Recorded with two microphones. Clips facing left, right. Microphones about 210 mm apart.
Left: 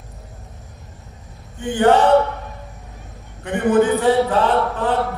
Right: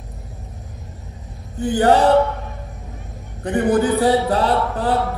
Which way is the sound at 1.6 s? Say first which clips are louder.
Even; 35° right (ahead or behind).